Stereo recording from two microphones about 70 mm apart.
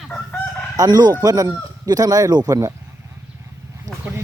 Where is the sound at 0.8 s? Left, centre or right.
Right.